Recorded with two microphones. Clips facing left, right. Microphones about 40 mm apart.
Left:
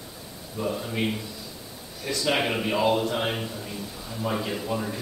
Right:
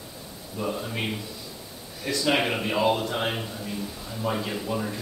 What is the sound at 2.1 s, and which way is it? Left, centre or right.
A man's voice, centre.